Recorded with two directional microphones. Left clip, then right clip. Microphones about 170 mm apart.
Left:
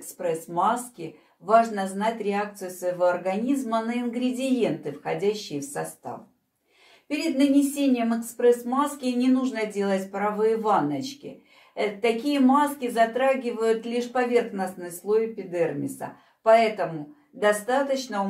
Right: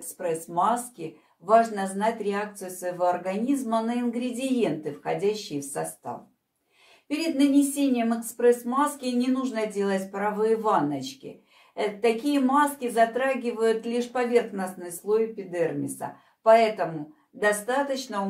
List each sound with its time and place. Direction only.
0.6 s speech: 20° right (ahead or behind)
7.1 s a woman's voice: 20° right (ahead or behind)